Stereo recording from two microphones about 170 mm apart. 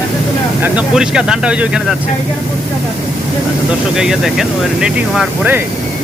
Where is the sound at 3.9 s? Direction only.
5° right (ahead or behind).